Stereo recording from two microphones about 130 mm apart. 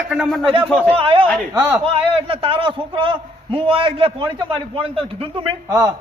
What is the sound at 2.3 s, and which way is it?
A man's voice, 45° right (ahead or behind).